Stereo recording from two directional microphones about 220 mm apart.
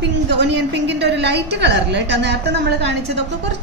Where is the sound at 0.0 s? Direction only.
50° right (ahead or behind).